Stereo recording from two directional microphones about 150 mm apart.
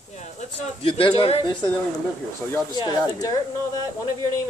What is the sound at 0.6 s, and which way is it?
Speech, 40° left (ahead or behind).